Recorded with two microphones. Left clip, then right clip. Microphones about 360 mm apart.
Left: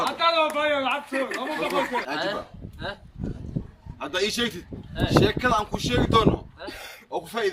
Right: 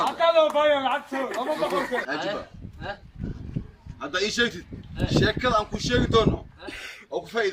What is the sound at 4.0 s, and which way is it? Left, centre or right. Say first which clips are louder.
A man's voice: right 1 dB; centre.